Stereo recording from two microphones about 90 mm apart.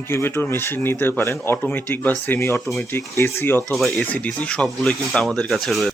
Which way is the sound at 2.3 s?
35° left (ahead or behind).